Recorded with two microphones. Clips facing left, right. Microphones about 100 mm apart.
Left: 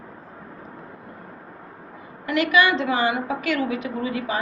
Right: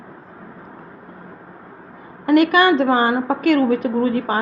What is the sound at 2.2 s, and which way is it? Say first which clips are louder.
A woman's voice: right 6 dB; 50° right (ahead or behind).